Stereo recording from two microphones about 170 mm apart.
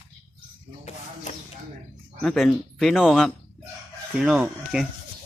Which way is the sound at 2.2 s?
Centre (ahead or behind).